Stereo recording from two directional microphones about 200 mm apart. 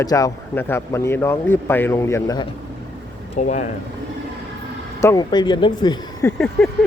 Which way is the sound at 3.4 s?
35° left (ahead or behind).